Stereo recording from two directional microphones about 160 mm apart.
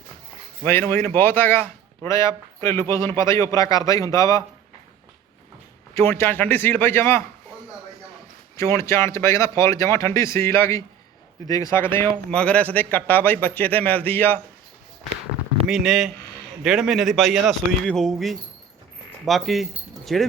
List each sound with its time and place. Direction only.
0.6 s a man's voice: 15° left (ahead or behind)
5.9 s speech: 15° left (ahead or behind)
8.5 s speech: 15° left (ahead or behind)
15.6 s a man's voice: centre (ahead or behind)